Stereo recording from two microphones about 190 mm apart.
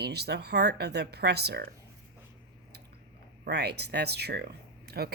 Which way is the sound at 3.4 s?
60° right (ahead or behind).